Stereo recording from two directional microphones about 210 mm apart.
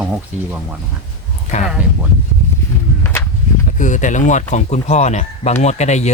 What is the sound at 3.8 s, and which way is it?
Speech, 35° left (ahead or behind).